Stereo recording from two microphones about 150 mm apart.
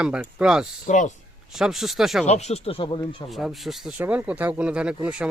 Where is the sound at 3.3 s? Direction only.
Centre (ahead or behind).